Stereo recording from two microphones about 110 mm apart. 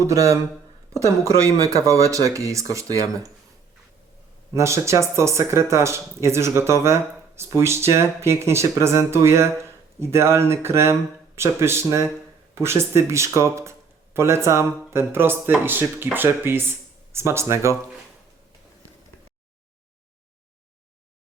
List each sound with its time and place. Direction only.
0.0 s speech: 30° right (ahead or behind)
4.5 s speech: 25° right (ahead or behind)